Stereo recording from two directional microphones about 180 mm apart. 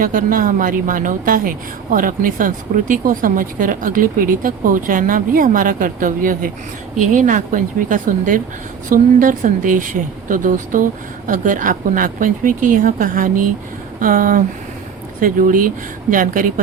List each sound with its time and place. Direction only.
0.0 s a woman's voice: 50° right (ahead or behind)